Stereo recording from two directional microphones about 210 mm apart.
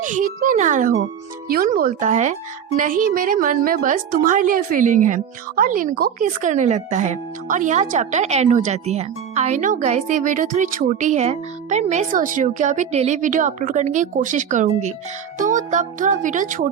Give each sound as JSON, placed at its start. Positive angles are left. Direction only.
{"t": 0.0, "sound": "a woman's voice", "side_deg": -40}